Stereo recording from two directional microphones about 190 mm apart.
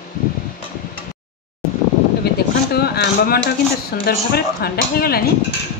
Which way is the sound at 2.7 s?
55° left (ahead or behind).